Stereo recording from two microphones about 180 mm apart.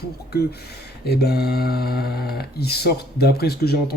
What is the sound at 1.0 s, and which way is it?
Speech, 65° left (ahead or behind).